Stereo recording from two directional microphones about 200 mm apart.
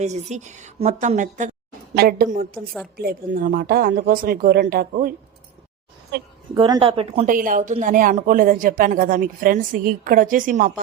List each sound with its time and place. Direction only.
0.0 s a woman's voice: 35° right (ahead or behind)
2.0 s speech: 50° right (ahead or behind)
6.5 s speech: 20° right (ahead or behind)
7.3 s speech: 40° right (ahead or behind)